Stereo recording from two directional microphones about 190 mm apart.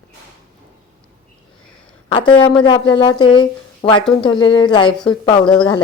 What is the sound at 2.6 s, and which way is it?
A woman's voice, 25° left (ahead or behind).